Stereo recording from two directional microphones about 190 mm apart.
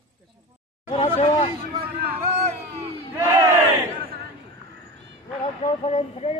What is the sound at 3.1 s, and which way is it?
Battle cry, 15° right (ahead or behind).